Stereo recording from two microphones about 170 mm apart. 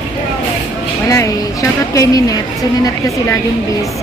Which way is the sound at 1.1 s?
20° left (ahead or behind).